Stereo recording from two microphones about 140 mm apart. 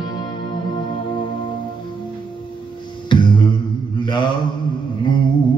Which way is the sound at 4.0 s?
35° left (ahead or behind).